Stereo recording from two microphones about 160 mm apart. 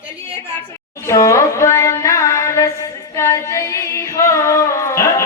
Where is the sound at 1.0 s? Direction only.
20° left (ahead or behind).